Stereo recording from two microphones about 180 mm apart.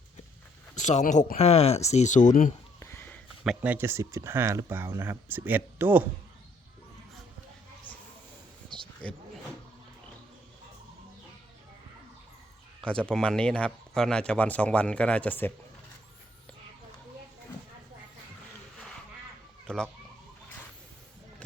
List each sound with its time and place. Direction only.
0.8 s speech: 40° left (ahead or behind)
2.8 s a sound: 10° left (ahead or behind)
3.4 s speech: 5° right (ahead or behind)
7.9 s a sound: 10° left (ahead or behind)
12.8 s speech: 5° left (ahead or behind)
19.6 s speech: 5° left (ahead or behind)